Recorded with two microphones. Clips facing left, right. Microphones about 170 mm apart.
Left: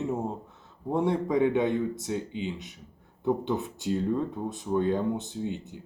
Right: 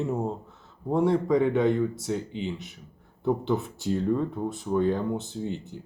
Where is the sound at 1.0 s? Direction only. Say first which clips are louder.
Right 2 dB; 20° left (ahead or behind).